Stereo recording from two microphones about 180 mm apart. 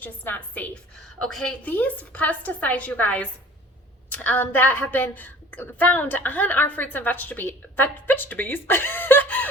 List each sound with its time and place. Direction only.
0.0 s a woman's voice: 10° left (ahead or behind)